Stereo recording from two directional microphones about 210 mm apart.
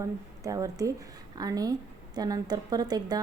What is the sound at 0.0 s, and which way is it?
Speech, 15° right (ahead or behind).